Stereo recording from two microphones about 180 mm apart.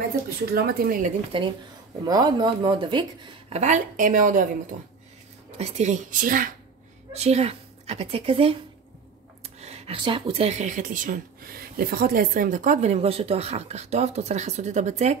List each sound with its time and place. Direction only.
0.6 s speech: 55° right (ahead or behind)
1.3 s speech: 30° right (ahead or behind)
3.5 s a woman's voice: 40° right (ahead or behind)
5.6 s a woman's voice: 35° right (ahead or behind)
7.2 s a woman's voice: 35° right (ahead or behind)